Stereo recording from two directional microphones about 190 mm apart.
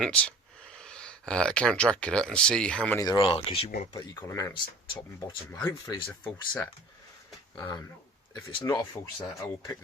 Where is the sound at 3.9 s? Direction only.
20° left (ahead or behind).